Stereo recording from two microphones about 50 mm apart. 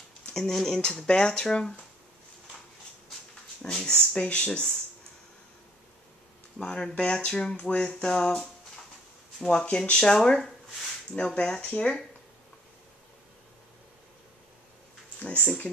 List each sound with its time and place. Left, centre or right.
0.3 s speech: centre
1.0 s speech: centre
3.6 s speech: centre
6.6 s speech: centre
10.3 s a sound: centre
11.1 s speech: centre
15.1 s speech: left